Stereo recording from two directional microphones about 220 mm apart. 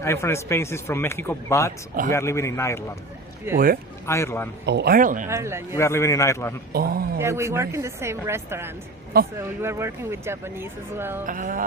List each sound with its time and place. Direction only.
0.0 s speech: 10° left (ahead or behind)
3.5 s speech: 10° right (ahead or behind)
4.0 s speech: 10° left (ahead or behind)
4.6 s speech: 50° right (ahead or behind)
5.3 s speech: 10° right (ahead or behind)
5.7 s speech: 10° left (ahead or behind)
6.7 s speech: 45° right (ahead or behind)
7.2 s speech: 15° right (ahead or behind)
11.3 s speech: 40° right (ahead or behind)